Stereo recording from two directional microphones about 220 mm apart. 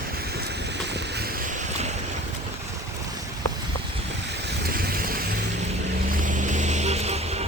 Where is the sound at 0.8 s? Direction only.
50° right (ahead or behind).